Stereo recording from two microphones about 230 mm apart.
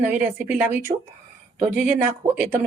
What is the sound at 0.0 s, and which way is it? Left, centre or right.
Speech, centre.